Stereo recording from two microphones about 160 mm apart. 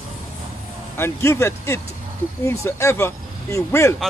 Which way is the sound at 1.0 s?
15° left (ahead or behind).